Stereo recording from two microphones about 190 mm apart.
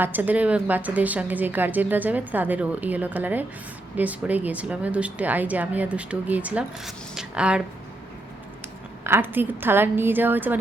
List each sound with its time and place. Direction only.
0.0 s a woman's voice: 10° right (ahead or behind)
9.0 s a woman's voice: 10° right (ahead or behind)